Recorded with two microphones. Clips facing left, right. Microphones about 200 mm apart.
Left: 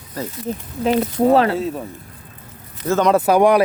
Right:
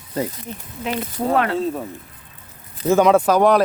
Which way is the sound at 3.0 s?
5° left (ahead or behind).